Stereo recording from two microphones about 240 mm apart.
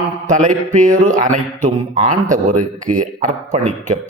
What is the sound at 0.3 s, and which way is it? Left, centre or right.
Speech, right.